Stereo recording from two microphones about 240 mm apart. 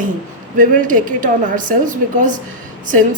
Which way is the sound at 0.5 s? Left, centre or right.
Right.